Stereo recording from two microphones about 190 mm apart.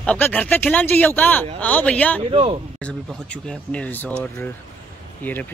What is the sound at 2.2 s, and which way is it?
Speech, 30° right (ahead or behind).